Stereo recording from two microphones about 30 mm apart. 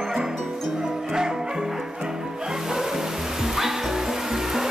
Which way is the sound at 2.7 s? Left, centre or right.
Centre.